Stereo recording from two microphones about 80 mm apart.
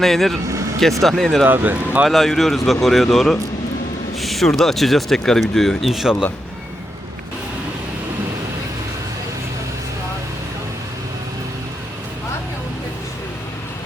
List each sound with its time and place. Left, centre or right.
0.0 s speech: centre
1.5 s speech: right
2.0 s speech: centre